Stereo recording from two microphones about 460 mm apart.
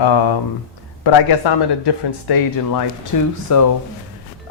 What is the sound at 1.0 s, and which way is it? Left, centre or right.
A man's voice, left.